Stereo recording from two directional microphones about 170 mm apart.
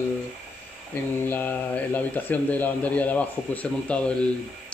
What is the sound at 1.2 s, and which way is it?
Speech, 10° left (ahead or behind).